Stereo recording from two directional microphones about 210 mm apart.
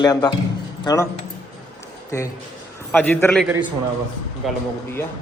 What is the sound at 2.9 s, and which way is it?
Speech, 10° left (ahead or behind).